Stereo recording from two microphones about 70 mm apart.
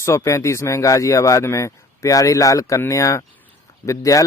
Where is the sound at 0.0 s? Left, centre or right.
Left.